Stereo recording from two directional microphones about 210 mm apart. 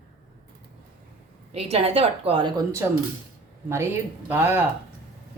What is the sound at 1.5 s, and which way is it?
Speech, 30° right (ahead or behind).